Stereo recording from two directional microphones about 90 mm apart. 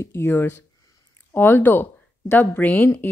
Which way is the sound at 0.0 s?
30° left (ahead or behind).